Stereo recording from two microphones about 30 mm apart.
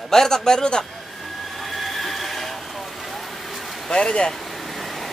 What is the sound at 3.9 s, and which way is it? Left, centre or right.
Speech, left.